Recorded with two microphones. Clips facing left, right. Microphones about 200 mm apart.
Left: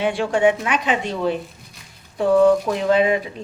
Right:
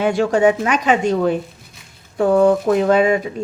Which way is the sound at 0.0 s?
45° right (ahead or behind).